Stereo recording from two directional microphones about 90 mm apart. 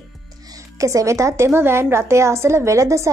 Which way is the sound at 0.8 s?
35° right (ahead or behind).